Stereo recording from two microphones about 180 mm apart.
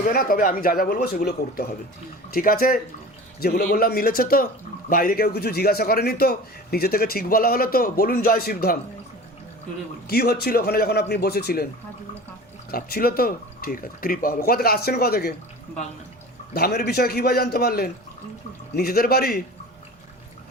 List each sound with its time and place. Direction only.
0.0 s a man's voice: 55° left (ahead or behind)
10.1 s a man's voice: 60° left (ahead or behind)
12.7 s a man's voice: 55° left (ahead or behind)
16.6 s a man's voice: 65° left (ahead or behind)